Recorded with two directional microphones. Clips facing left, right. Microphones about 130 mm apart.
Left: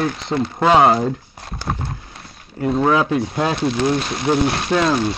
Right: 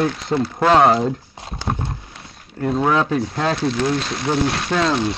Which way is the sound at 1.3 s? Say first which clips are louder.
Right 1 dB; 25° right (ahead or behind).